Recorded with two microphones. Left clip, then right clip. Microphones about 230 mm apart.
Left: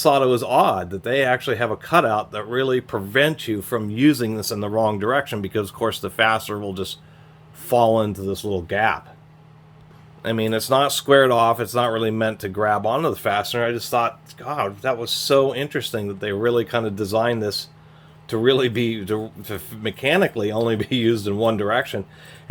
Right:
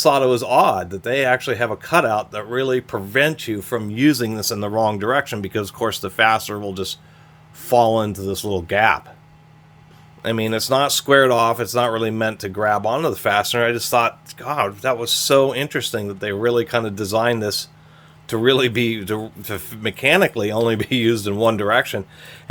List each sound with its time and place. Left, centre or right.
0.0 s speech: centre; by 9.0 s right
10.2 s speech: centre